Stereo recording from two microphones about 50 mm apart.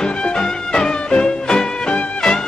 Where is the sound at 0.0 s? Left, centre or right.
Centre.